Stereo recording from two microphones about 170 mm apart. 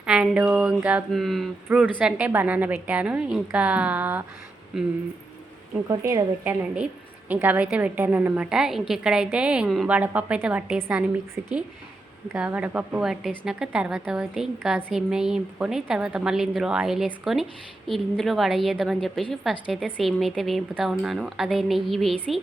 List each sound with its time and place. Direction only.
0.0 s a woman's voice: 5° right (ahead or behind)
5.9 s speech: 25° right (ahead or behind)
6.4 s speech: 10° right (ahead or behind)
12.3 s a woman's voice: 10° right (ahead or behind)